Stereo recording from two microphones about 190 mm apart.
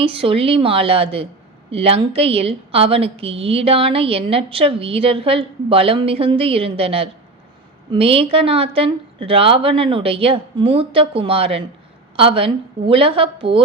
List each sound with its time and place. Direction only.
0.0 s a woman's voice: 30° right (ahead or behind)